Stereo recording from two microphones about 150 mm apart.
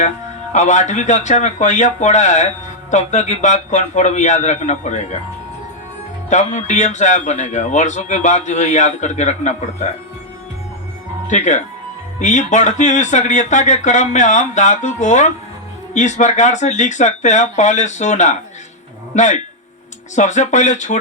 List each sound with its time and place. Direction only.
0.5 s speech: 55° left (ahead or behind)
6.3 s speech: 55° left (ahead or behind)
11.3 s speech: 50° left (ahead or behind)